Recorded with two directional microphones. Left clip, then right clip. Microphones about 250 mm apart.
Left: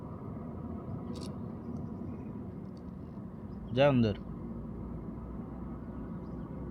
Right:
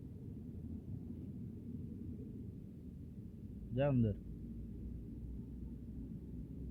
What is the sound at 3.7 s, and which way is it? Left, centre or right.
Speech, centre.